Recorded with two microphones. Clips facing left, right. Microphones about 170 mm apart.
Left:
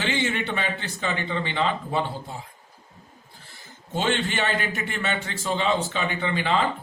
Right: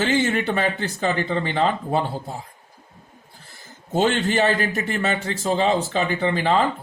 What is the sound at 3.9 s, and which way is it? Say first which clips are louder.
Speech: right 6 dB; 40° right (ahead or behind).